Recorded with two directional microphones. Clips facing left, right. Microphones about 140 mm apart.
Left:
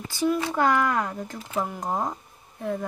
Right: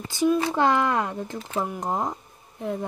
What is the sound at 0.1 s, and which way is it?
Speech, 20° right (ahead or behind).